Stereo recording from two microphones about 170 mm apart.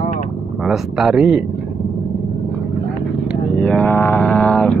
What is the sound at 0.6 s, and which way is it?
Speech, centre (ahead or behind).